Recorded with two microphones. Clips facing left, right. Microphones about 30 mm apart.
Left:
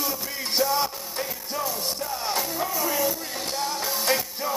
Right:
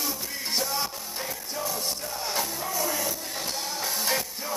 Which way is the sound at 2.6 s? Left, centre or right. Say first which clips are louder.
Left 4 dB; centre.